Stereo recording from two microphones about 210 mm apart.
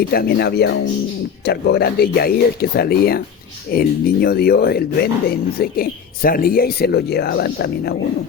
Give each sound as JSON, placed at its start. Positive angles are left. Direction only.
{"t": 0.1, "sound": "speech", "side_deg": 50}